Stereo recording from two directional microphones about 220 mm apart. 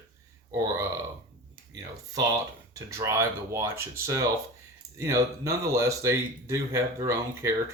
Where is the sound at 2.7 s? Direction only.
15° right (ahead or behind).